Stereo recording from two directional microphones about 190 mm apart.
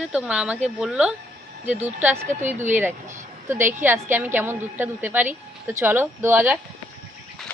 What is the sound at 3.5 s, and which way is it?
Speech, 10° right (ahead or behind).